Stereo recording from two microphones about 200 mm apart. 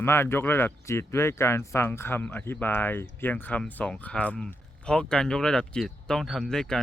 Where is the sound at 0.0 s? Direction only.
10° left (ahead or behind).